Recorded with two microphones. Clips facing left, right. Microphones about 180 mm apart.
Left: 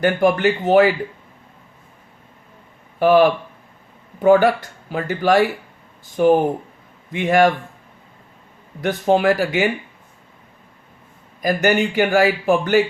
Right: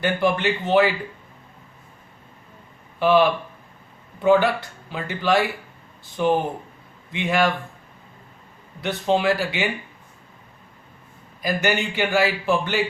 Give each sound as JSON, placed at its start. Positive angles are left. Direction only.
{"t": 0.0, "sound": "a man's voice", "side_deg": 45}
{"t": 3.0, "sound": "a man's voice", "side_deg": 45}
{"t": 8.8, "sound": "a man's voice", "side_deg": 45}
{"t": 11.4, "sound": "a man's voice", "side_deg": 45}